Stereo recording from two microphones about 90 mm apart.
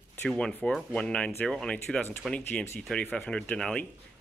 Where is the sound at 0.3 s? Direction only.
10° left (ahead or behind).